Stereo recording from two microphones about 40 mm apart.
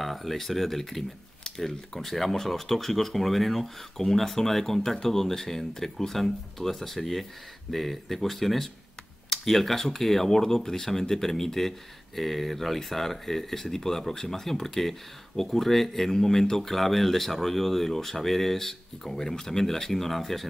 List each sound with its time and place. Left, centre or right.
0.0 s speech: centre